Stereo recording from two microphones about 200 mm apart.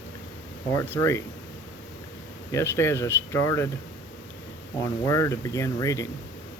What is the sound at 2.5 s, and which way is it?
Speech, 10° left (ahead or behind).